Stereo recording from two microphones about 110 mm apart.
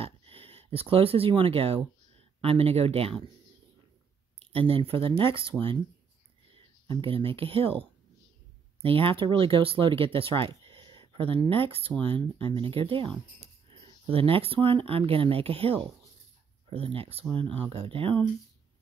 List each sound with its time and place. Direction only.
0.0 s speech: 60° right (ahead or behind)
4.4 s speech: 60° right (ahead or behind)
8.8 s speech: 55° right (ahead or behind)